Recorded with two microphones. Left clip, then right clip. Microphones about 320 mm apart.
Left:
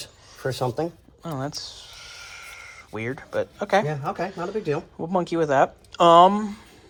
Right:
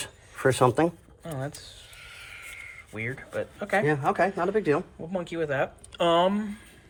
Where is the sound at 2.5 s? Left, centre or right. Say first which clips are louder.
Left 3 dB; centre.